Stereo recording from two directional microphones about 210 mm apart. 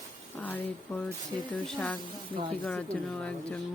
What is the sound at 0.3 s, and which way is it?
Speech, 5° left (ahead or behind).